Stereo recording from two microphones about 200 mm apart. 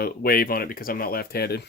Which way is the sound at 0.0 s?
50° left (ahead or behind).